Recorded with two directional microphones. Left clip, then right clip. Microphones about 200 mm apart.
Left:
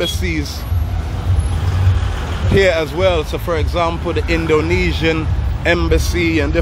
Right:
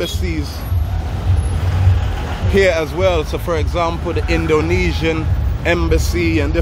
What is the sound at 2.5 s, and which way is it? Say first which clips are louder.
Speech: even; 5° left (ahead or behind).